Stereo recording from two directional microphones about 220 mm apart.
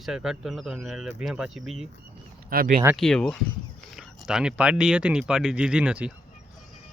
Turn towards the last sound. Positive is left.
turn(degrees=-5)  # may be behind; listen again after turning